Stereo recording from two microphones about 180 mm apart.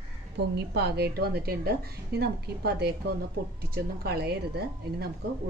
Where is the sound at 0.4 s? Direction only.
65° right (ahead or behind).